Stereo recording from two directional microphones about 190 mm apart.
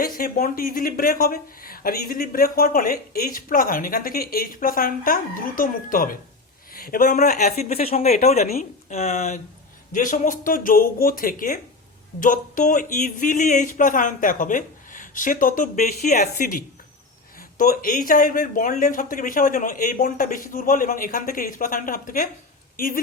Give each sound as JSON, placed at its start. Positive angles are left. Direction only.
{"t": 0.0, "sound": "a man's voice", "side_deg": 50}
{"t": 17.6, "sound": "speech", "side_deg": 45}